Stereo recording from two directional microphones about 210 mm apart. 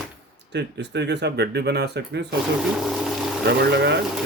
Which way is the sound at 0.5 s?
55° right (ahead or behind).